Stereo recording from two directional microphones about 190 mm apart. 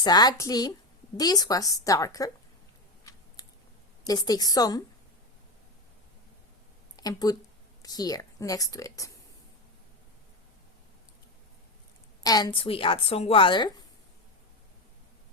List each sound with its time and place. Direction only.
0.0 s a woman's voice: 20° left (ahead or behind)
3.0 s scissors: 20° left (ahead or behind)
4.0 s a woman's voice: 20° left (ahead or behind)
6.9 s a woman's voice: 20° left (ahead or behind)
12.2 s a woman's voice: 20° left (ahead or behind)